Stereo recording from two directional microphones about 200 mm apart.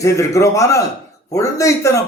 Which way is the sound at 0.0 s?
15° left (ahead or behind).